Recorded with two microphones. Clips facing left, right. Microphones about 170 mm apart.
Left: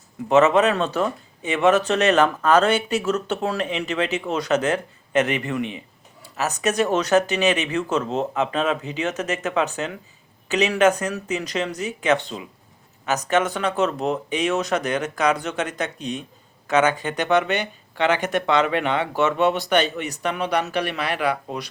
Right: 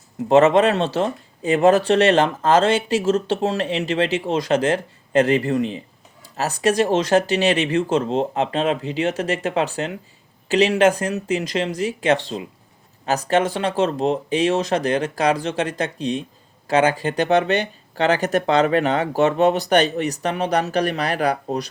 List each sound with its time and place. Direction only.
0.3 s speech: 35° right (ahead or behind)